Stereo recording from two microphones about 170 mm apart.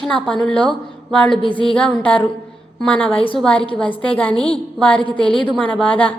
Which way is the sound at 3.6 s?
30° left (ahead or behind).